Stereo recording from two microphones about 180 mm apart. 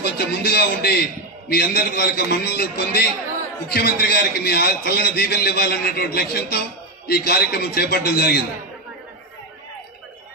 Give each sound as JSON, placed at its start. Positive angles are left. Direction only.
{"t": 0.0, "sound": "a man's voice", "side_deg": 65}